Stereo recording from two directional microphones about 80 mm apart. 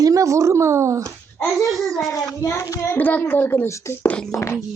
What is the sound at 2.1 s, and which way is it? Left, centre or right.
A child's voice, left.